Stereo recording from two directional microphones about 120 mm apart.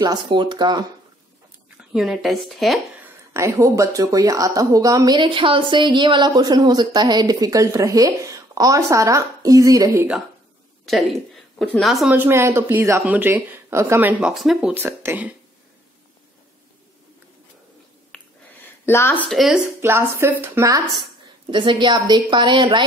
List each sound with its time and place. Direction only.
0.0 s a woman's voice: 40° right (ahead or behind)
1.8 s speech: 5° right (ahead or behind)
3.3 s a woman's voice: 25° right (ahead or behind)
11.5 s speech: 5° left (ahead or behind)
12.1 s a woman's voice: 20° right (ahead or behind)
14.2 s speech: centre (ahead or behind)
14.7 s speech: 20° right (ahead or behind)
18.1 s a sound: 5° left (ahead or behind)
18.9 s speech: 20° left (ahead or behind)
19.3 s speech: centre (ahead or behind)
19.8 s a woman's voice: 20° right (ahead or behind)
21.5 s a woman's voice: 45° right (ahead or behind)